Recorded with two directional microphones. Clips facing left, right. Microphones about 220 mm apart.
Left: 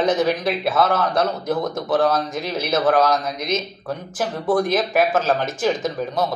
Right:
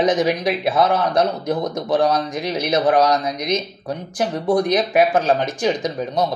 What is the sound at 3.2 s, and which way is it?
Speech, centre (ahead or behind).